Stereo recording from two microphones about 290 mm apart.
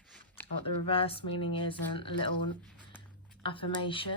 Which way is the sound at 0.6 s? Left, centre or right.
Centre.